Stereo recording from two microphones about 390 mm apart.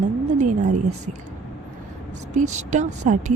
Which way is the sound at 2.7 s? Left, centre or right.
Centre.